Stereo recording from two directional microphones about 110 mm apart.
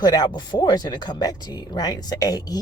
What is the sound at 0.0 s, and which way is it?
Speech, 40° left (ahead or behind).